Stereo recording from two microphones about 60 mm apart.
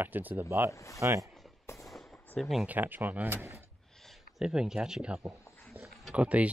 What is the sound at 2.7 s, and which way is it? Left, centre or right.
Speech, right.